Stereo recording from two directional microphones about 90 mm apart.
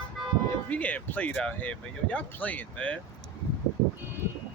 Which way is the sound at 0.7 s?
15° left (ahead or behind).